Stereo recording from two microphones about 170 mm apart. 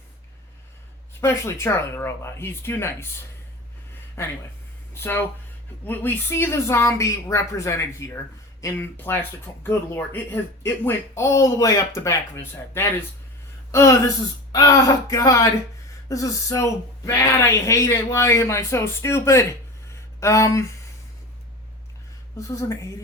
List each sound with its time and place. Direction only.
1.2 s a woman's voice: 15° left (ahead or behind)
4.9 s a woman's voice: 15° left (ahead or behind)
22.4 s a woman's voice: 15° left (ahead or behind)